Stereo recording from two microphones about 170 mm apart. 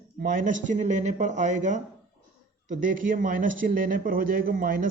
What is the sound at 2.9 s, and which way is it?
A man's voice, 50° right (ahead or behind).